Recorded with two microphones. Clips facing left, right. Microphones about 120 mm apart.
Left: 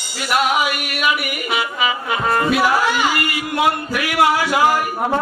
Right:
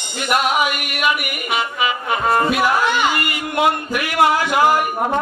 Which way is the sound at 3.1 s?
20° right (ahead or behind).